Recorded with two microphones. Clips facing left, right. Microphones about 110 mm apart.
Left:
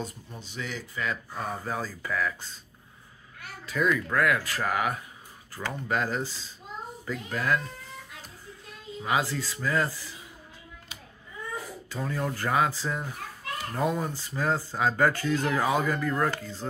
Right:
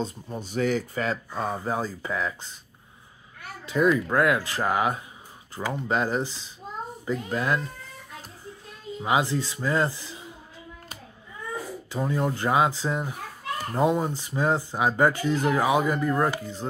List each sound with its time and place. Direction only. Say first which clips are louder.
0.4 s speech: right 12 dB; 45° right (ahead or behind)
1.1 s speech: right 4 dB; 25° right (ahead or behind)
3.6 s speech: right 5 dB; 25° right (ahead or behind)
9.0 s speech: right 4 dB; 20° right (ahead or behind)
11.9 s speech: right 5 dB; 20° right (ahead or behind)